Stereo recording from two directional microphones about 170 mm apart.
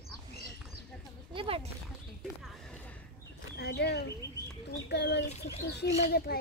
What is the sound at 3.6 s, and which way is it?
A child's voice, 75° left (ahead or behind).